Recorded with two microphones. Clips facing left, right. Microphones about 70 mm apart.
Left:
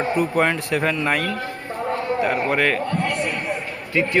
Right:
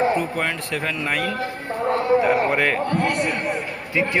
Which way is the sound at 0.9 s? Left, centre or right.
Centre.